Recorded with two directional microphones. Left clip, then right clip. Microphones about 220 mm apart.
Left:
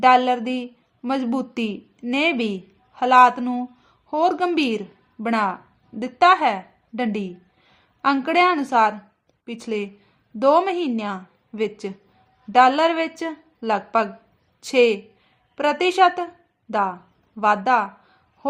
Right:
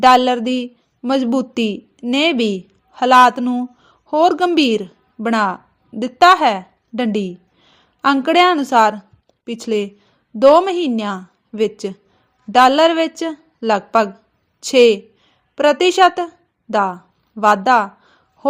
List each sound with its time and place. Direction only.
0.0 s a woman's voice: 25° right (ahead or behind)